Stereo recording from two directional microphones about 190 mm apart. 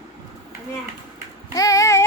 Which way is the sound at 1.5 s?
15° left (ahead or behind).